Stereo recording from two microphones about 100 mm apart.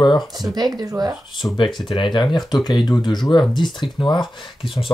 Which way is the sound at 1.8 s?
50° left (ahead or behind).